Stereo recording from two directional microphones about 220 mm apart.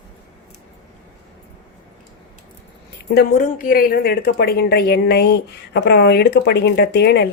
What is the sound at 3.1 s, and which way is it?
A woman's voice, 40° left (ahead or behind).